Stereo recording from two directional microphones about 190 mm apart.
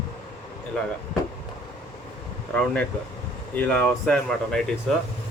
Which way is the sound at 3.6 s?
10° left (ahead or behind).